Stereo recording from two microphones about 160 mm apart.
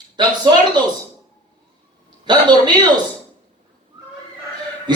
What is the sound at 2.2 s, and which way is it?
Speech, 25° right (ahead or behind).